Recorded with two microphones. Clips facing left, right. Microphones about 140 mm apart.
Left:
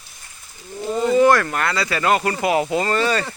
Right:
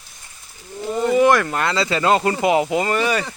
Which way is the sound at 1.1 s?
15° right (ahead or behind).